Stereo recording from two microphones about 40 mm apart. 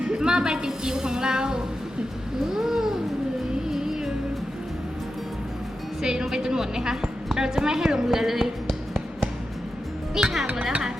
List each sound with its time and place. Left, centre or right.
0.0 s a woman's voice: centre
2.5 s a sound: centre
3.7 s music: centre
6.0 s a woman's voice: centre
10.4 s speech: right